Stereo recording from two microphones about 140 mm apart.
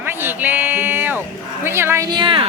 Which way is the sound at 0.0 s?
15° right (ahead or behind).